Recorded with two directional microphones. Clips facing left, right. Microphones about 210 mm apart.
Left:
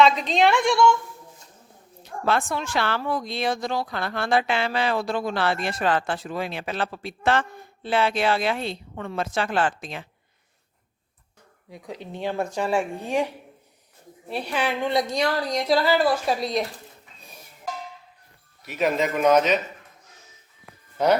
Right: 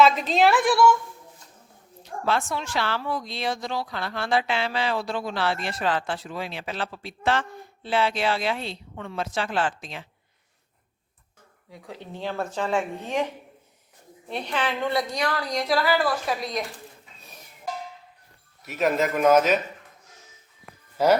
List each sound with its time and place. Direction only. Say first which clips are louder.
0.0 s a woman's voice: even; 5° right (ahead or behind)
2.2 s a woman's voice: left 2 dB; 55° left (ahead or behind)
11.7 s a woman's voice: left 3 dB; 15° left (ahead or behind)
18.6 s a woman's voice: even; centre (ahead or behind)
21.0 s a woman's voice: right 1 dB; 5° right (ahead or behind)